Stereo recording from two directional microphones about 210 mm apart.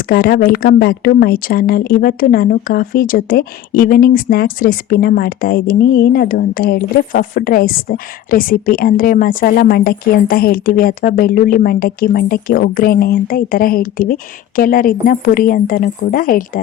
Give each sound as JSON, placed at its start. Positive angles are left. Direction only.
{"t": 0.1, "sound": "speech", "side_deg": 45}